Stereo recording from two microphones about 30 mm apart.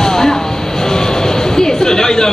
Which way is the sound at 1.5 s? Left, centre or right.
Centre.